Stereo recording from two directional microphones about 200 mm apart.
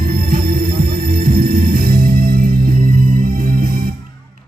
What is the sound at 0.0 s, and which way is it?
Music, 45° right (ahead or behind).